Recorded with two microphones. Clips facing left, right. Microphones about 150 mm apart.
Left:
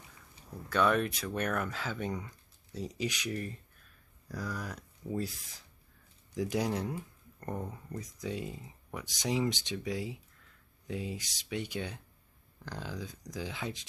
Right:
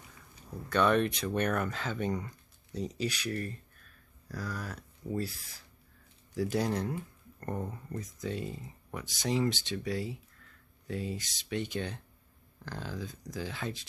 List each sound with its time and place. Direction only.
0.7 s speech: 5° left (ahead or behind)
3.0 s speech: 15° left (ahead or behind)
7.5 s speech: centre (ahead or behind)
7.9 s speech: 15° left (ahead or behind)